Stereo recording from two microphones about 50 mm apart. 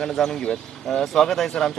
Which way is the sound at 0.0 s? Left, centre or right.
Centre.